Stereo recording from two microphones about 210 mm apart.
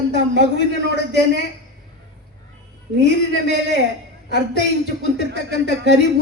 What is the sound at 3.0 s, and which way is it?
Speech, 55° right (ahead or behind).